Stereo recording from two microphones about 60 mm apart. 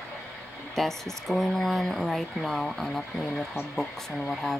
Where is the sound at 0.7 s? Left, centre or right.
Centre.